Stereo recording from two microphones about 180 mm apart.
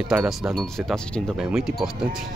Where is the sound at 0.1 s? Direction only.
5° right (ahead or behind).